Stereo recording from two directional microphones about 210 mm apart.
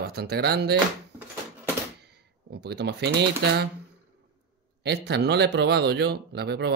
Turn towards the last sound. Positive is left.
turn(degrees=-50)  # may be behind; listen again after turning